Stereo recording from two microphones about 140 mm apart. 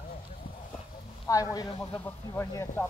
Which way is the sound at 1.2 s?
25° left (ahead or behind).